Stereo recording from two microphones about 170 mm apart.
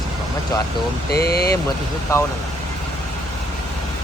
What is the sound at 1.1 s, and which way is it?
Speech, 65° left (ahead or behind).